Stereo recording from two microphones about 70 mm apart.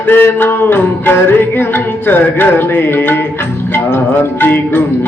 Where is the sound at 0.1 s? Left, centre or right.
Left.